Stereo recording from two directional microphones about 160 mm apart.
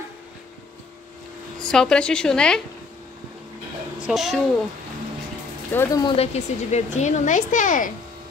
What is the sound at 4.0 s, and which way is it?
Speech, centre (ahead or behind).